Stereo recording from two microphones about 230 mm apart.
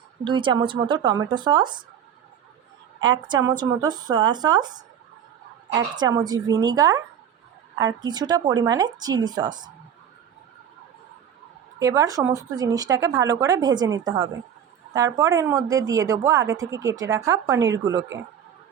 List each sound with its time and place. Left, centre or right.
0.3 s speech: centre
3.0 s speech: centre
5.7 s speech: centre
11.8 s speech: centre